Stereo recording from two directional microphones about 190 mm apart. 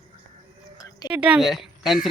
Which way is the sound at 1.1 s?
5° right (ahead or behind).